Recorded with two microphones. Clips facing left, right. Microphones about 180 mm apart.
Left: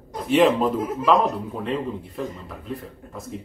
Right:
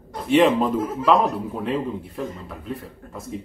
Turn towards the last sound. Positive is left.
turn(degrees=0)  # may be behind; listen again after turning